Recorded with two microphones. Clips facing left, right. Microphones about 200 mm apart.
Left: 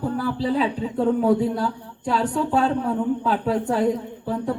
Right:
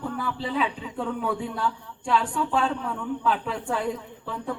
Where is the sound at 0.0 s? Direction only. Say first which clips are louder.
Left 7 dB; 35° left (ahead or behind).